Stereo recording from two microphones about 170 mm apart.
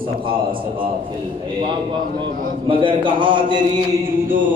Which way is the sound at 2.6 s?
30° right (ahead or behind).